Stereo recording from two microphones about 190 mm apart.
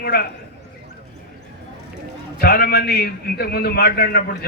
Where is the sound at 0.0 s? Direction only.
55° left (ahead or behind).